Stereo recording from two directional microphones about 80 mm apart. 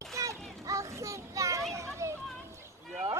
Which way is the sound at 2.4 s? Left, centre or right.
Right.